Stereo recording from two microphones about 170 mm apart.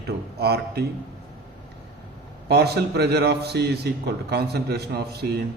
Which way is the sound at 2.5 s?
75° right (ahead or behind).